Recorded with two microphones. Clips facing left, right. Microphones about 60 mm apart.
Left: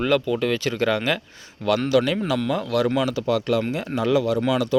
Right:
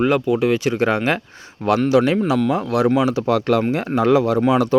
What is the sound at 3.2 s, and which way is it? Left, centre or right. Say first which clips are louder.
Speech: right 4 dB; right.